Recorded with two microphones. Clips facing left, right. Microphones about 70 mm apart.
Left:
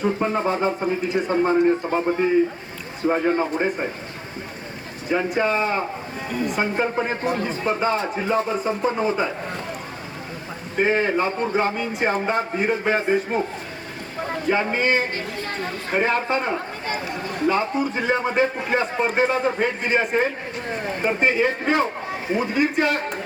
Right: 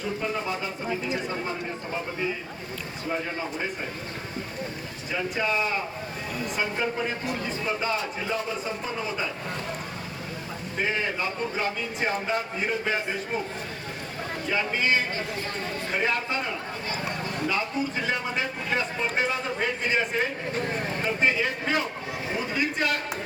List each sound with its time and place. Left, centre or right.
0.0 s a man's voice: left
5.1 s a man's voice: left
10.8 s a man's voice: left
14.5 s a man's voice: left